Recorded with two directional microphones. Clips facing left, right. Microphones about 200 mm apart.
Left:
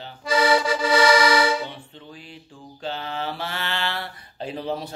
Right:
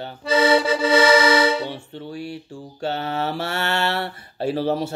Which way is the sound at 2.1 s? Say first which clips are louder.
Right 13 dB; 70° right (ahead or behind).